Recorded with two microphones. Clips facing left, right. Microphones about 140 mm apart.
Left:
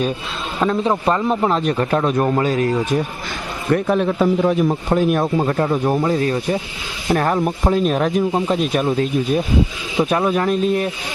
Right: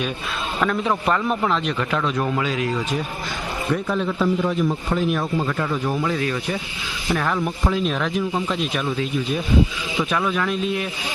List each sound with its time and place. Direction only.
0.6 s a man's voice: 30° left (ahead or behind)
1.5 s speech: 40° left (ahead or behind)
7.1 s speech: 45° left (ahead or behind)